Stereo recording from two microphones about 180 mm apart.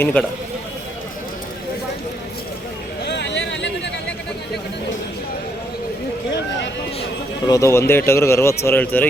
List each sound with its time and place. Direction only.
0.0 s speech: 10° left (ahead or behind)
3.0 s a sound: 70° left (ahead or behind)
7.4 s speech: 15° left (ahead or behind)